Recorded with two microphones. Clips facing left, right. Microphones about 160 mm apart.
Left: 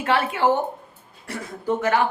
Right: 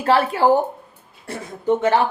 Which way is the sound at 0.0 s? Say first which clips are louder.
Right 4 dB; 35° right (ahead or behind).